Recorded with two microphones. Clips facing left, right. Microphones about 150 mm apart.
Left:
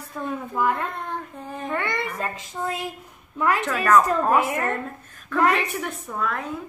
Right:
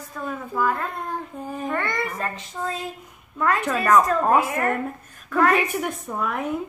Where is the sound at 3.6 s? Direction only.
10° right (ahead or behind).